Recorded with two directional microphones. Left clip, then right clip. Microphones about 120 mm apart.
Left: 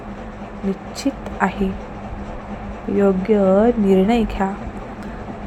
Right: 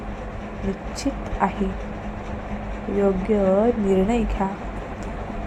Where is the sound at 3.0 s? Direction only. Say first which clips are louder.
Left 4 dB; 30° left (ahead or behind).